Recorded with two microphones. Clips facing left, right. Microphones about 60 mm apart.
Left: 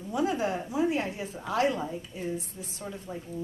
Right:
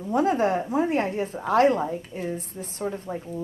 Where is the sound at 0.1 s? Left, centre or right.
Right.